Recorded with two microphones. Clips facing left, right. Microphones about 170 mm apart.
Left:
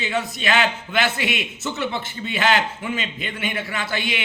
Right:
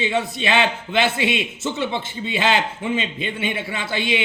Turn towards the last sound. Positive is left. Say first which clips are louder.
# right 3 dB
turn(degrees=-25)  # may be behind; listen again after turning